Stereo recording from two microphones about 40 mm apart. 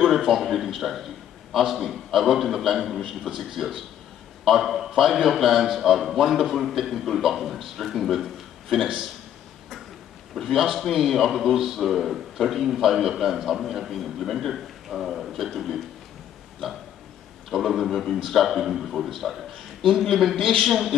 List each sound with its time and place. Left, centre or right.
0.1 s a man's voice: centre
10.3 s a man's voice: centre